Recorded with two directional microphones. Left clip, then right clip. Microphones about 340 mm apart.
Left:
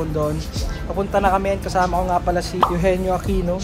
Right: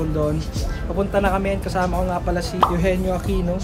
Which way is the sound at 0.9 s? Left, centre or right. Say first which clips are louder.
Left 2 dB; centre.